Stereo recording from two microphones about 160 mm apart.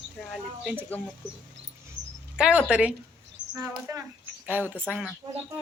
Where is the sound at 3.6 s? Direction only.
20° right (ahead or behind).